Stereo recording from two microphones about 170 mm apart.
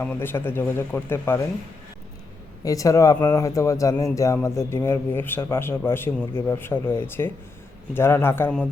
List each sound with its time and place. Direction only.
0.0 s a man's voice: 10° left (ahead or behind)
2.6 s a man's voice: 20° left (ahead or behind)